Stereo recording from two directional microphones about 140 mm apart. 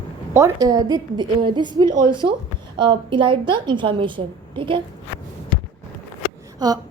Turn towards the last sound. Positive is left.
turn(degrees=-30)  # may be behind; listen again after turning